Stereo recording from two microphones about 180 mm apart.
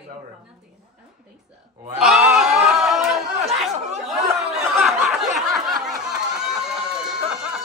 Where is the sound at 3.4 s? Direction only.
35° right (ahead or behind).